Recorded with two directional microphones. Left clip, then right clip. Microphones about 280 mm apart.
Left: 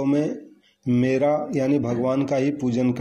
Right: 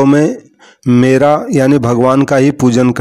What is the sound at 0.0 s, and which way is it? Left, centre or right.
Speech, right.